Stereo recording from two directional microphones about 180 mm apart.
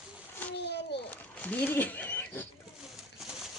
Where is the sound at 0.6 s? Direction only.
70° left (ahead or behind).